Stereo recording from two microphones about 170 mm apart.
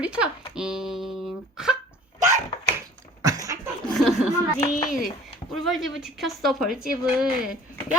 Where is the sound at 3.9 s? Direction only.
Centre (ahead or behind).